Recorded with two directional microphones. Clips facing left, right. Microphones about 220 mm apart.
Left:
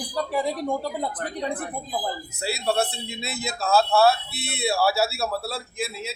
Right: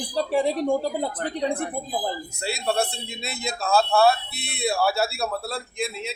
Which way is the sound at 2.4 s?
Centre (ahead or behind).